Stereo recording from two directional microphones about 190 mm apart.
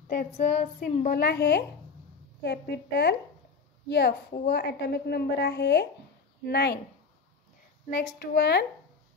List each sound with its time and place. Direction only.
0.1 s child singing: 45° left (ahead or behind)
0.7 s a woman's voice: 45° left (ahead or behind)
8.2 s a woman's voice: 55° left (ahead or behind)